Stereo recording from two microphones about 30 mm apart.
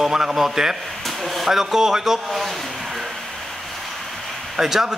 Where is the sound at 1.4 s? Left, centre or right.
Centre.